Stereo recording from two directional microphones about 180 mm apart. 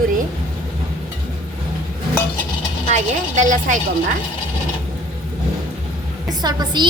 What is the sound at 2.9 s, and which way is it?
Speech, 40° right (ahead or behind).